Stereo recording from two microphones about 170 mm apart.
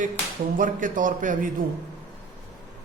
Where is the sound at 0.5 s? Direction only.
50° right (ahead or behind).